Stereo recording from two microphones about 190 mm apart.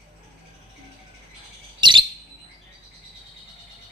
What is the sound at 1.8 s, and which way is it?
Bird, 25° right (ahead or behind).